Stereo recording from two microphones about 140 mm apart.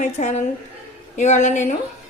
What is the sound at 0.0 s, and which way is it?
Speech, 60° left (ahead or behind).